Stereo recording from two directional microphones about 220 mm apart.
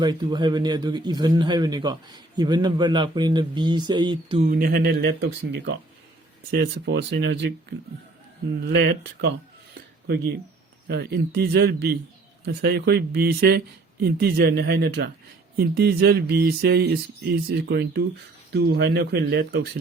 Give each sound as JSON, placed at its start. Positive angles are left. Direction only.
{"t": 0.0, "sound": "a man's voice", "side_deg": -20}
{"t": 4.4, "sound": "speech", "side_deg": -40}
{"t": 8.6, "sound": "speech", "side_deg": -50}
{"t": 10.8, "sound": "speech", "side_deg": -45}